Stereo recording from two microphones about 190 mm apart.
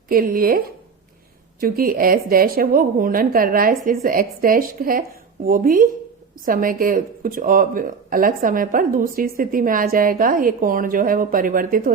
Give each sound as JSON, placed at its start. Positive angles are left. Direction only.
{"t": 0.1, "sound": "speech", "side_deg": -50}
{"t": 1.6, "sound": "speech", "side_deg": -50}